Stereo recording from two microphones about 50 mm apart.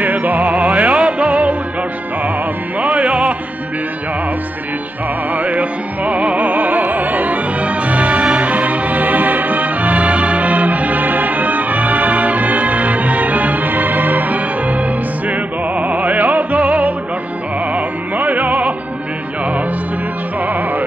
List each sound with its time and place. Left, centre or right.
0.0 s music: right
2.8 s music: right
5.3 s music: right